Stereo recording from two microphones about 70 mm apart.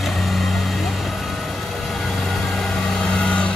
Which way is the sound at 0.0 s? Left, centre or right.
Centre.